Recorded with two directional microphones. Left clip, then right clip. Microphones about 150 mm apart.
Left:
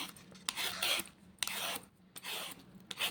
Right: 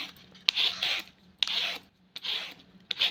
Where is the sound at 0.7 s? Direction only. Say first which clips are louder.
Right 4 dB; 40° left (ahead or behind).